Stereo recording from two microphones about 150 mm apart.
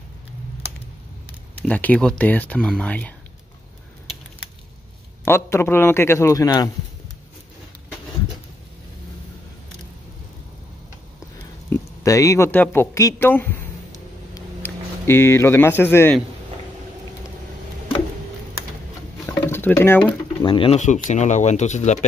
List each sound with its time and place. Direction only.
1.6 s speech: 10° left (ahead or behind)
5.2 s speech: 15° left (ahead or behind)
11.7 s speech: 20° left (ahead or behind)
14.3 s a sound: 15° left (ahead or behind)
19.2 s a sound: 15° left (ahead or behind)
20.4 s speech: 35° left (ahead or behind)
20.8 s speech: 50° left (ahead or behind)